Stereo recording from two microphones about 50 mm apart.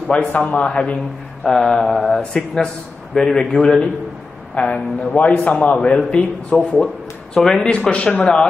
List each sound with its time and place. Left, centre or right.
0.3 s a man's voice: left
1.4 s mantra: centre
4.6 s a man's voice: left
5.8 s a man's voice: centre
7.3 s mantra: centre
7.7 s a man's voice: left